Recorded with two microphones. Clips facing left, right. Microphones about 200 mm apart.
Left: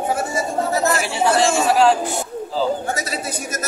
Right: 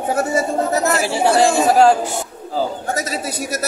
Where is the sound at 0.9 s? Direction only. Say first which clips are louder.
Right 3 dB; 30° right (ahead or behind).